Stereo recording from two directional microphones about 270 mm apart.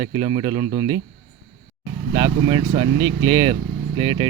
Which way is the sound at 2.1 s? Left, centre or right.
Centre.